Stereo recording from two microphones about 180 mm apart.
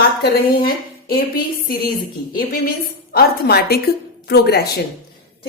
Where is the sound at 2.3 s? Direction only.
55° left (ahead or behind).